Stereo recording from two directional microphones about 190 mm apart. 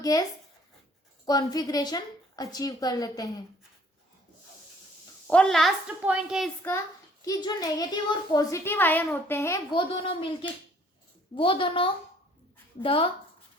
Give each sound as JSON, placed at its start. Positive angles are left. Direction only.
{"t": 0.0, "sound": "a woman's voice", "side_deg": 20}
{"t": 5.3, "sound": "a woman's voice", "side_deg": 5}
{"t": 7.3, "sound": "a woman's voice", "side_deg": 20}
{"t": 9.7, "sound": "a woman's voice", "side_deg": 30}